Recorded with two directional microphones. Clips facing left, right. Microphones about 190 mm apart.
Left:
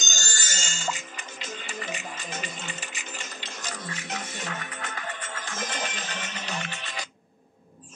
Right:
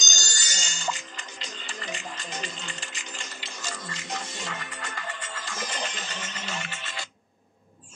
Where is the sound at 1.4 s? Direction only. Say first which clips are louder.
Left 4 dB; 15° left (ahead or behind).